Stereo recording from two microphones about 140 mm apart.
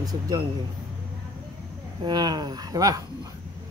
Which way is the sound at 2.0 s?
30° right (ahead or behind).